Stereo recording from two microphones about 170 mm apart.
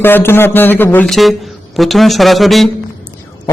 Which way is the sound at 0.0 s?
15° left (ahead or behind).